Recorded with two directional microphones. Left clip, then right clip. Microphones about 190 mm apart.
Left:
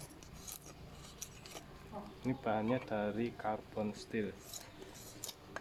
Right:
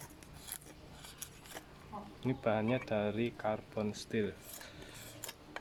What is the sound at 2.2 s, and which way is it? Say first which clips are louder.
Speech: right 2 dB; 55° right (ahead or behind).